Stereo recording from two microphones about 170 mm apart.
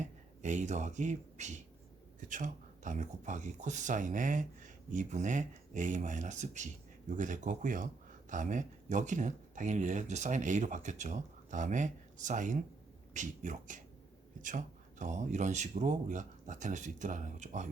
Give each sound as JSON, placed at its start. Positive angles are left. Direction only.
{"t": 0.0, "sound": "speech", "side_deg": -45}